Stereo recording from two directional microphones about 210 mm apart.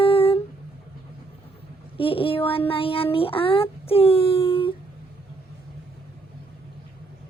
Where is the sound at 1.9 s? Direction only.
25° left (ahead or behind).